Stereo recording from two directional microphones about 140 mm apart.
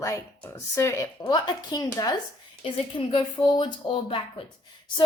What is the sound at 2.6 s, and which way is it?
A woman's voice, 40° left (ahead or behind).